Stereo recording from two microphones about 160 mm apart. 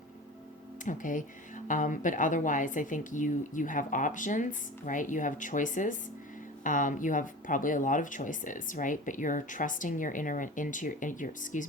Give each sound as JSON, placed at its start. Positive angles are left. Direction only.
{"t": 0.9, "sound": "speech", "side_deg": 55}